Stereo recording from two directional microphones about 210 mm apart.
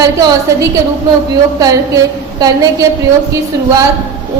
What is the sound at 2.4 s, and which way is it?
Speech, 15° right (ahead or behind).